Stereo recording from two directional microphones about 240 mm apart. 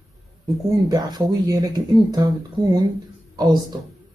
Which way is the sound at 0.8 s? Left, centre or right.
Centre.